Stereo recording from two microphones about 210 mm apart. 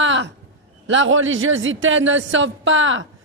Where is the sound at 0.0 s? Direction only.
65° right (ahead or behind).